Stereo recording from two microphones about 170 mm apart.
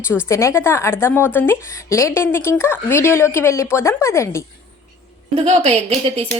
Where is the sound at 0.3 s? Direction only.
15° left (ahead or behind).